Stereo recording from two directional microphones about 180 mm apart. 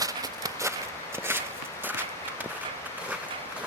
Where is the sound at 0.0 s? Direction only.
20° right (ahead or behind).